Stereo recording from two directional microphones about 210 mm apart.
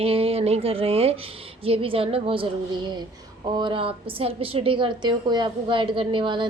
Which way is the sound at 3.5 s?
20° right (ahead or behind).